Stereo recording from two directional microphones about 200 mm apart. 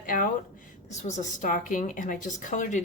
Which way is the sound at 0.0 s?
45° left (ahead or behind).